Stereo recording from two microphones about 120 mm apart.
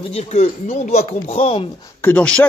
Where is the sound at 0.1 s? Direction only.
65° left (ahead or behind).